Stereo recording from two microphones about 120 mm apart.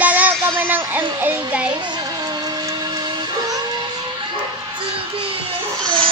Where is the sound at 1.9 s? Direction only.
35° right (ahead or behind).